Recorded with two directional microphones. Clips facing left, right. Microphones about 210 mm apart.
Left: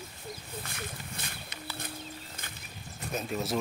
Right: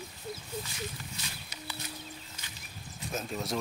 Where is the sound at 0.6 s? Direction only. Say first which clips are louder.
Right 1 dB; 55° left (ahead or behind).